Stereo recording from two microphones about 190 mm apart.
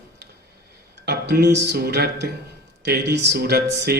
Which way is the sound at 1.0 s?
60° right (ahead or behind).